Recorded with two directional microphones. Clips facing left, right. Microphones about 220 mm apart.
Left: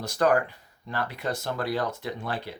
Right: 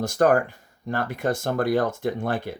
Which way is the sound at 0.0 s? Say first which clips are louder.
Right 4 dB; 45° right (ahead or behind).